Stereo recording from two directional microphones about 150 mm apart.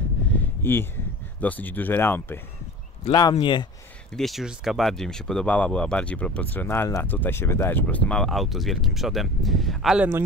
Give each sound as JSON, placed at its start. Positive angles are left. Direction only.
{"t": 0.3, "sound": "a sound", "side_deg": 15}
{"t": 1.4, "sound": "speech", "side_deg": 10}
{"t": 3.1, "sound": "speech", "side_deg": 30}
{"t": 4.2, "sound": "speech", "side_deg": 0}